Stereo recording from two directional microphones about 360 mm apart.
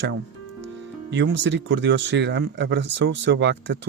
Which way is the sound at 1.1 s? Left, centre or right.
Right.